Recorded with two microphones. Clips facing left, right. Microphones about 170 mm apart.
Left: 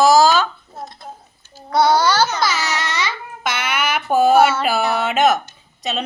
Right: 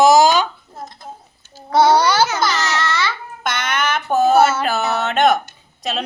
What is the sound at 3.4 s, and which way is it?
A woman's voice, 5° left (ahead or behind).